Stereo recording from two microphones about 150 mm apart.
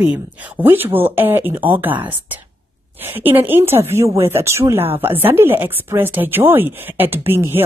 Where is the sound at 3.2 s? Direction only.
15° right (ahead or behind).